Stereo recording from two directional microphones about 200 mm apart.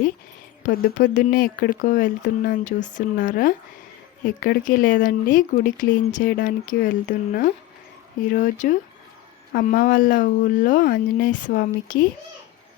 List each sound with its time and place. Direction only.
0.6 s speech: 40° left (ahead or behind)